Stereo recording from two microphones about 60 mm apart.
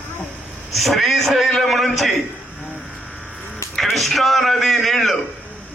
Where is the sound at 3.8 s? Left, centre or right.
Centre.